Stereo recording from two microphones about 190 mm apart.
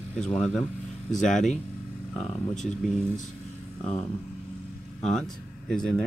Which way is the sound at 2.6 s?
40° left (ahead or behind).